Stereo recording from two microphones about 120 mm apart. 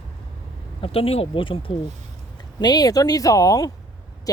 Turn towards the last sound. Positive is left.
turn(degrees=30)  # may be behind; listen again after turning